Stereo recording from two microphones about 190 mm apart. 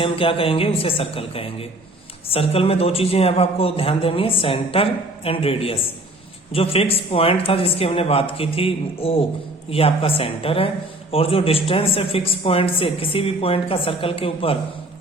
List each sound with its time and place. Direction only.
0.0 s a man's voice: 30° left (ahead or behind)